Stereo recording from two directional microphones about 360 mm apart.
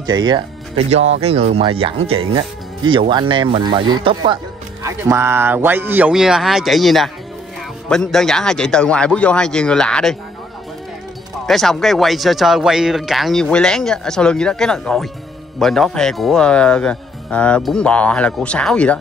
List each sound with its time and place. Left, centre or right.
0.0 s speech: centre
11.4 s speech: centre